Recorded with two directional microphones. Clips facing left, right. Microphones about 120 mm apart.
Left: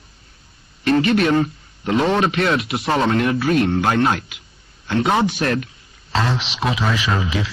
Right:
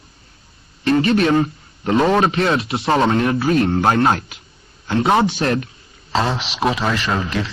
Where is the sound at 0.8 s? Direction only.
35° right (ahead or behind).